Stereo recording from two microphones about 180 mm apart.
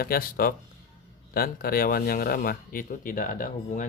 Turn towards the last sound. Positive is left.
turn(degrees=45)  # may be behind; listen again after turning